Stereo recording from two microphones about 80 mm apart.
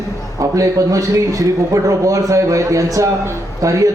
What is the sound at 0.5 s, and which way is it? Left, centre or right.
A man's voice, right.